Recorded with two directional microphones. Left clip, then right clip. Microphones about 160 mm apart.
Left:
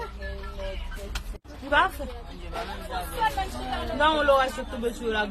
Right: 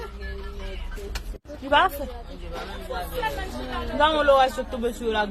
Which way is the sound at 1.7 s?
45° right (ahead or behind).